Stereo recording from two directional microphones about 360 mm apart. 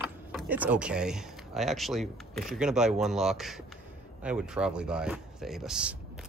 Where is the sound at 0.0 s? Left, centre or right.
Centre.